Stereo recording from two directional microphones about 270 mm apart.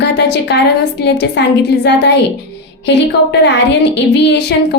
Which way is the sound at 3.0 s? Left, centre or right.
Left.